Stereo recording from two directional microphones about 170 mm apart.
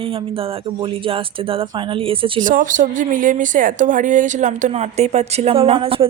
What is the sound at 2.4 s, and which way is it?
A woman's voice, 50° right (ahead or behind).